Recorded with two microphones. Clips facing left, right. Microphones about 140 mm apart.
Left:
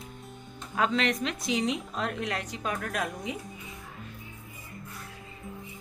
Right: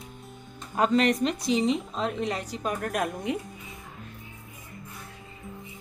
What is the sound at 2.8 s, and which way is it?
Speech, 55° right (ahead or behind).